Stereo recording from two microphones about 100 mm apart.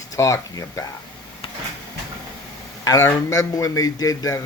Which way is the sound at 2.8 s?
40° left (ahead or behind).